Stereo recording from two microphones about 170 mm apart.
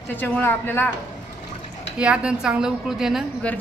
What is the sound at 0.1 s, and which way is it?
Speech, 10° left (ahead or behind).